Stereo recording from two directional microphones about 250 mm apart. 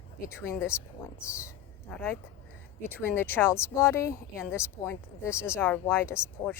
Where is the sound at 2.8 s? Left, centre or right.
Centre.